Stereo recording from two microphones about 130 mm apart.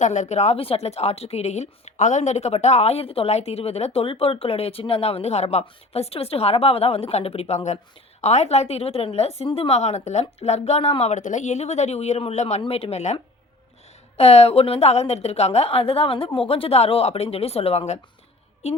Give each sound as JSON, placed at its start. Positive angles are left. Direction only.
{"t": 0.0, "sound": "a woman's voice", "side_deg": 65}
{"t": 14.2, "sound": "a woman's voice", "side_deg": 50}